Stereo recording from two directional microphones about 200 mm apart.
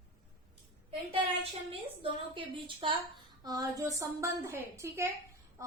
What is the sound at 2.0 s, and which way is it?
A woman's voice, 25° right (ahead or behind).